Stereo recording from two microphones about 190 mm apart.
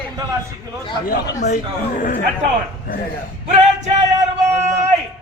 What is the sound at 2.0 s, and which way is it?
Speech, 45° left (ahead or behind).